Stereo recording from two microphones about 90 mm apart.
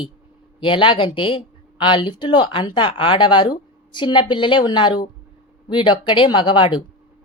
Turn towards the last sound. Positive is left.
turn(degrees=65)  # may be behind; listen again after turning